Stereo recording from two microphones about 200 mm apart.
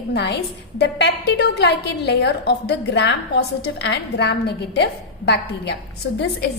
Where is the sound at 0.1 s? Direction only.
55° left (ahead or behind).